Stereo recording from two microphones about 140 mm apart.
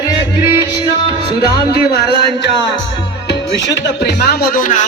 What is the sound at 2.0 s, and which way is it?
Speech, 30° right (ahead or behind).